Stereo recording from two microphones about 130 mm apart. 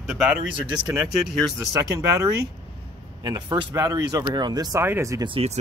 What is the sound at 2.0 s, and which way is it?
Speech, 25° right (ahead or behind).